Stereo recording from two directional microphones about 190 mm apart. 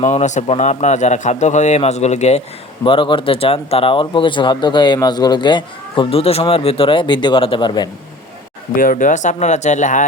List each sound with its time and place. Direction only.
0.0 s a man's voice: 40° left (ahead or behind)
2.8 s speech: 25° left (ahead or behind)
8.7 s a man's voice: 45° left (ahead or behind)